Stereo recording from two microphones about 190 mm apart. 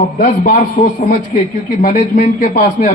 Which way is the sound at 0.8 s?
40° left (ahead or behind).